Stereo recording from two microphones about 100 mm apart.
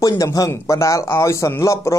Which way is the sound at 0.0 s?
35° left (ahead or behind).